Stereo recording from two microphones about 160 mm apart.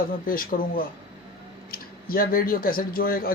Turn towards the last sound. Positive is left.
turn(degrees=65)  # may be behind; listen again after turning